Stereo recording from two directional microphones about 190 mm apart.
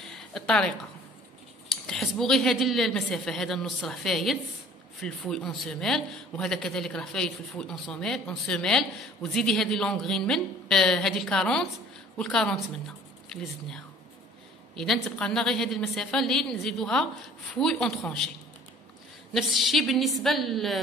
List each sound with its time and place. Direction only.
0.1 s a sound: 5° left (ahead or behind)
1.9 s a man's voice: centre (ahead or behind)
14.8 s a man's voice: 5° left (ahead or behind)
19.3 s a man's voice: centre (ahead or behind)